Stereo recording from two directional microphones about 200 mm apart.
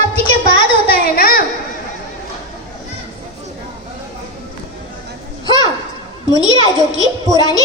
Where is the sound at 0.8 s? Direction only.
50° left (ahead or behind).